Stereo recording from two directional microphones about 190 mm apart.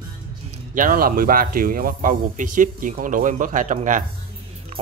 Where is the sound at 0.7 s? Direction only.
50° right (ahead or behind).